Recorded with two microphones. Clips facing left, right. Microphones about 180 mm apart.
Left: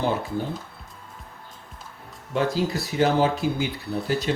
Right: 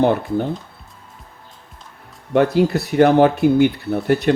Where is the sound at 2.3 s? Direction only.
60° right (ahead or behind).